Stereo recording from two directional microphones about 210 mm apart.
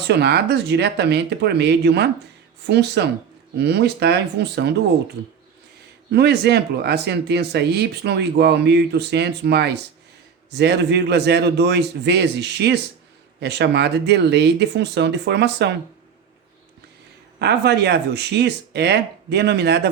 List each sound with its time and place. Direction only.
0.1 s speech: 50° right (ahead or behind)
6.1 s speech: 50° right (ahead or behind)
17.4 s speech: 55° right (ahead or behind)